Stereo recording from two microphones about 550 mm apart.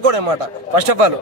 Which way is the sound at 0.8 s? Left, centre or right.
Right.